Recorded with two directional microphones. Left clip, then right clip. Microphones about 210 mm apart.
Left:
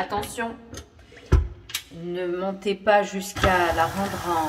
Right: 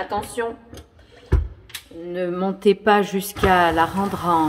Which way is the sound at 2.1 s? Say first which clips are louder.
Right 3 dB; 45° right (ahead or behind).